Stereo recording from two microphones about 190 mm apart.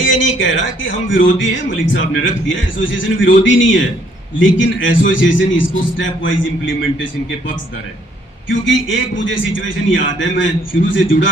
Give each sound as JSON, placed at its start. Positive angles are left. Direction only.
{"t": 0.0, "sound": "speech", "side_deg": 80}
{"t": 8.4, "sound": "a man's voice", "side_deg": 80}